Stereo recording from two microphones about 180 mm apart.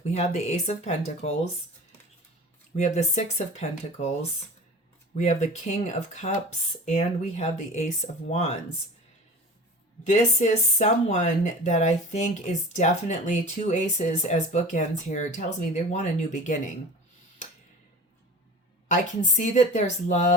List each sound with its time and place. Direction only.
0.1 s speech: 40° left (ahead or behind)
2.7 s speech: 40° left (ahead or behind)
5.1 s speech: 40° left (ahead or behind)
10.1 s speech: 40° left (ahead or behind)
18.9 s speech: 40° left (ahead or behind)